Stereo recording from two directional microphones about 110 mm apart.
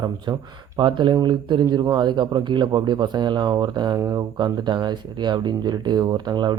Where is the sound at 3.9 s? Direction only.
30° right (ahead or behind).